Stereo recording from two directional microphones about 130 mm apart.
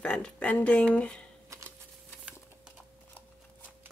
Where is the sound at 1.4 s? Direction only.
25° right (ahead or behind).